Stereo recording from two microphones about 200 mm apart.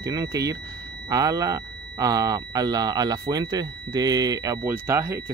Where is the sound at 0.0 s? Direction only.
20° right (ahead or behind).